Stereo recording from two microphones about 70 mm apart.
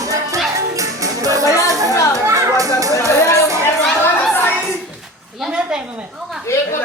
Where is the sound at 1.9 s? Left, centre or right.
Left.